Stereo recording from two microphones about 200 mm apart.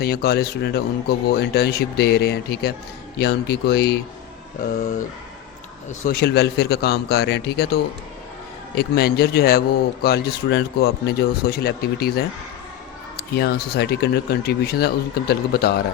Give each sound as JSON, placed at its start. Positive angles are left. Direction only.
{"t": 0.0, "sound": "speech", "side_deg": 50}
{"t": 6.1, "sound": "speech", "side_deg": 55}